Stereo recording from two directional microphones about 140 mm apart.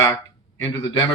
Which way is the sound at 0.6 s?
30° left (ahead or behind).